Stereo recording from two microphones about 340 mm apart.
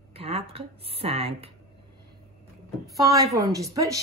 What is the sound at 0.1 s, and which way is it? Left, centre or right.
A woman's voice, centre.